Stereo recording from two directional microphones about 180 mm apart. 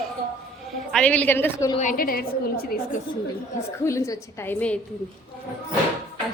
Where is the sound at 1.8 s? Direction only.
50° left (ahead or behind).